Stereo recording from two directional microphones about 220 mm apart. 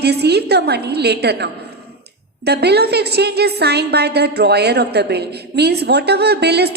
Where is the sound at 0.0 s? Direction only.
50° right (ahead or behind).